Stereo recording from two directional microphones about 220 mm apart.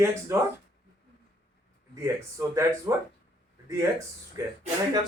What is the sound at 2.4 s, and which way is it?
Speech, 10° right (ahead or behind).